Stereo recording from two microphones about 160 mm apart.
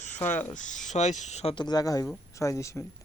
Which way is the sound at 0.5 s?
50° left (ahead or behind).